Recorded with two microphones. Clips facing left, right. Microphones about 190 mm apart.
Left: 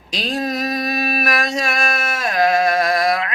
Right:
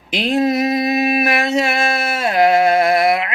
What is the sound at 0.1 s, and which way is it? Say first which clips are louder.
Mantra: right 6 dB; 25° right (ahead or behind).